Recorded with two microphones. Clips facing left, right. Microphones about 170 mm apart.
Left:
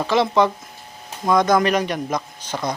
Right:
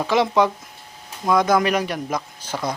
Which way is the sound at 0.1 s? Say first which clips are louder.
Left 1 dB; 10° right (ahead or behind).